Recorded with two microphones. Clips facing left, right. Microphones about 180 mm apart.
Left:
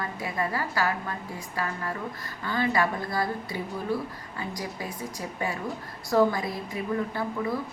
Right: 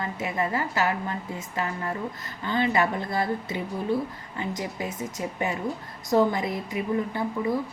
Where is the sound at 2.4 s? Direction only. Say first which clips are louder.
Right 2 dB; 20° right (ahead or behind).